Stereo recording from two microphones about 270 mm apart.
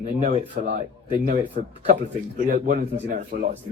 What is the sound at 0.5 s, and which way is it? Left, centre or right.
Speech, right.